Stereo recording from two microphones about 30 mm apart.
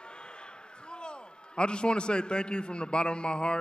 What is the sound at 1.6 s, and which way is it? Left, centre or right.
A man's voice, left.